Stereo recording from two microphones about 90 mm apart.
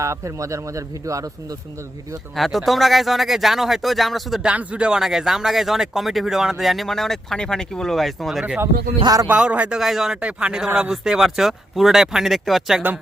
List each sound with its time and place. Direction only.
0.0 s speech: 35° right (ahead or behind)
2.3 s speech: centre (ahead or behind)
4.4 s speech: 15° right (ahead or behind)
9.2 s speech: 15° right (ahead or behind)